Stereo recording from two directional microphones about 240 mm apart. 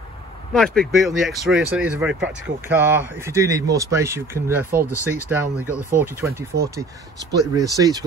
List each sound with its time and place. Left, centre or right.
0.5 s speech: centre
6.5 s speech: right
7.3 s speech: centre